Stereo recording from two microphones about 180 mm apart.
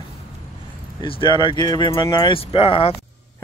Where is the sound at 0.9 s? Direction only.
30° left (ahead or behind).